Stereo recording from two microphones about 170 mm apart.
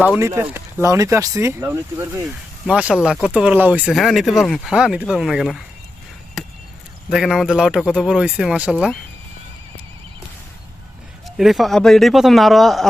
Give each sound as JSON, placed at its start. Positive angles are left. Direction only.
{"t": 0.0, "sound": "speech", "side_deg": -10}
{"t": 7.1, "sound": "speech", "side_deg": 0}
{"t": 11.3, "sound": "speech", "side_deg": 0}